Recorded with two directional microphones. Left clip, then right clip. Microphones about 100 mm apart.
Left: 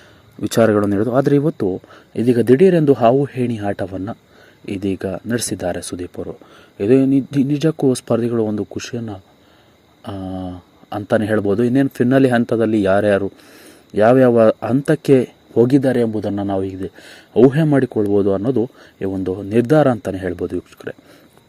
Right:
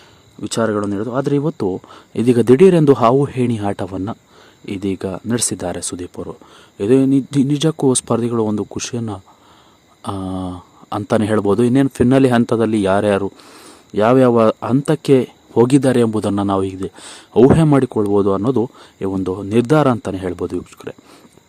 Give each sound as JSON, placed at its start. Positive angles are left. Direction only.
{"t": 0.4, "sound": "speech", "side_deg": 10}
{"t": 1.6, "sound": "speech", "side_deg": -30}
{"t": 13.5, "sound": "a sound", "side_deg": -40}
{"t": 13.9, "sound": "speech", "side_deg": -20}
{"t": 15.5, "sound": "speech", "side_deg": -45}
{"t": 16.0, "sound": "a man's voice", "side_deg": -75}
{"t": 16.3, "sound": "speech", "side_deg": -50}